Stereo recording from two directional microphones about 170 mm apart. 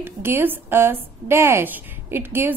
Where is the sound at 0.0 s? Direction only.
10° right (ahead or behind).